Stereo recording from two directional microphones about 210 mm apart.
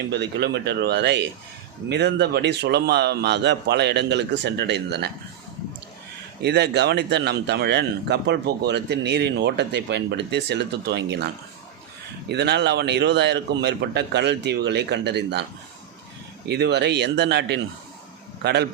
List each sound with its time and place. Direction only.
0.1 s speech: 50° right (ahead or behind)
6.4 s speech: 50° right (ahead or behind)
12.3 s speech: 55° right (ahead or behind)
16.5 s speech: 50° right (ahead or behind)